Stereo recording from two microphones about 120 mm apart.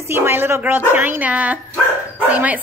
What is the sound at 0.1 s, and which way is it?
A woman's voice, 20° right (ahead or behind).